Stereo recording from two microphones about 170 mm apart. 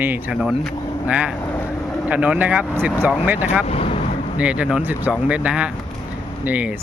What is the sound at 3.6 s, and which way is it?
Vehicle, 35° left (ahead or behind).